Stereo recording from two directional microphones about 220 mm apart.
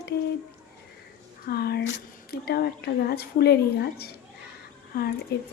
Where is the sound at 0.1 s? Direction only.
45° left (ahead or behind).